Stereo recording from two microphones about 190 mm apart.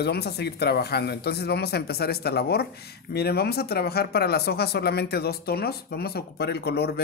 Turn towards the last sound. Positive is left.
turn(degrees=60)  # may be behind; listen again after turning